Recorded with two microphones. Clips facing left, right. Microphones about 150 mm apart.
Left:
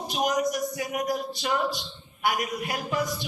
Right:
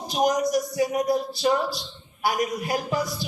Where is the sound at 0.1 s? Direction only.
35° right (ahead or behind).